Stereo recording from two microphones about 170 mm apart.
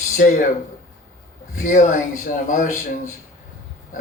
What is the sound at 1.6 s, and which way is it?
Speech, 45° left (ahead or behind).